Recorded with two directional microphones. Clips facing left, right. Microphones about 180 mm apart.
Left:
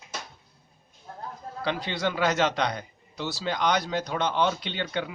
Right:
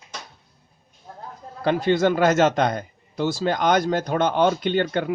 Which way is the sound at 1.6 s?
50° right (ahead or behind).